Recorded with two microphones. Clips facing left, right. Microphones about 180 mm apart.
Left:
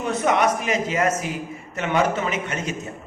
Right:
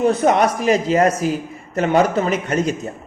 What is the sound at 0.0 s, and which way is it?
A man's voice, 35° right (ahead or behind).